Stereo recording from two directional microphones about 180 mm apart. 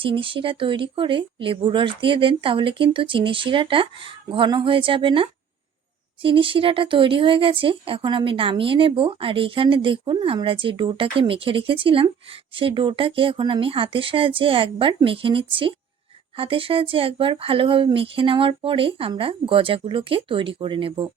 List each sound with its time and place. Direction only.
0.0 s speech: 30° right (ahead or behind)